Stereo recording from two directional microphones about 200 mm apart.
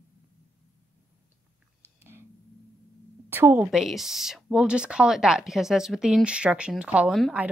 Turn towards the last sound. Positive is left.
turn(degrees=0)  # may be behind; listen again after turning